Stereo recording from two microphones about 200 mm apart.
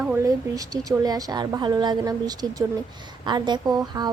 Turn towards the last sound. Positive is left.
turn(degrees=-20)  # may be behind; listen again after turning